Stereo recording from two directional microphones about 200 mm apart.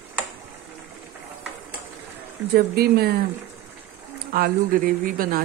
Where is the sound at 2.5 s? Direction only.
50° right (ahead or behind).